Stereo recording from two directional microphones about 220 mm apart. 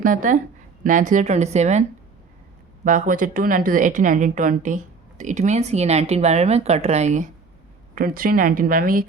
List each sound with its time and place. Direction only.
0.0 s a woman's voice: 35° right (ahead or behind)
2.8 s a woman's voice: 40° right (ahead or behind)